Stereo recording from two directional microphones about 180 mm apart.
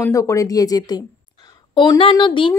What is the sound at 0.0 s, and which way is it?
A woman's voice, 15° left (ahead or behind).